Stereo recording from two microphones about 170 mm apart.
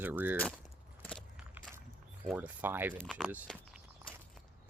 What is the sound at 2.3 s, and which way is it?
Speech, 10° right (ahead or behind).